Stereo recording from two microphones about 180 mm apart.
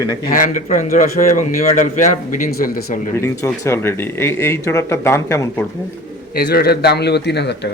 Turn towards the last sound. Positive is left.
turn(degrees=70)  # may be behind; listen again after turning